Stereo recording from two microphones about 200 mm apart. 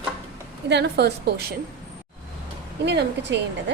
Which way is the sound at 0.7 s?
55° right (ahead or behind).